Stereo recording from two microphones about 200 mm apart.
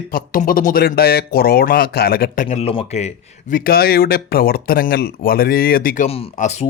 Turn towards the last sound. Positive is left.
turn(degrees=35)  # may be behind; listen again after turning